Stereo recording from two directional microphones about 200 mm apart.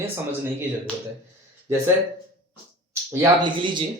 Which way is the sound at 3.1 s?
20° right (ahead or behind).